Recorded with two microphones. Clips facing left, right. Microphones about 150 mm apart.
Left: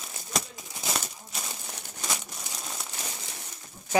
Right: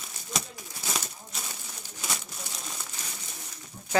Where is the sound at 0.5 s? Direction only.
20° left (ahead or behind).